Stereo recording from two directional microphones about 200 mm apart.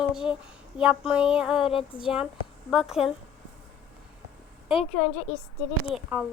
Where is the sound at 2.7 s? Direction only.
Centre (ahead or behind).